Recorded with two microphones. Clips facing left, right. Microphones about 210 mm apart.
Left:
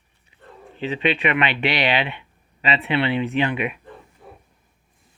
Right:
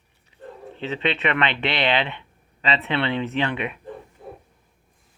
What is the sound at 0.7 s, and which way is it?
Speech, 10° left (ahead or behind).